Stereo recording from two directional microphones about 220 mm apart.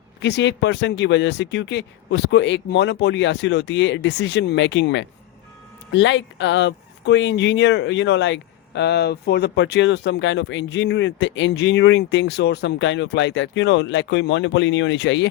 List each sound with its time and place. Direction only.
0.2 s speech: 50° left (ahead or behind)